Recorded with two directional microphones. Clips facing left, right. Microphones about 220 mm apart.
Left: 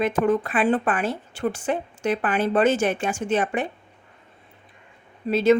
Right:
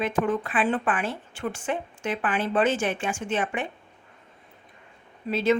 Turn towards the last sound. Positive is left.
turn(degrees=40)  # may be behind; listen again after turning